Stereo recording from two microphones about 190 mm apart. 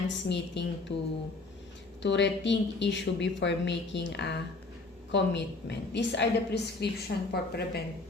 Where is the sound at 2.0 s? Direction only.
70° left (ahead or behind).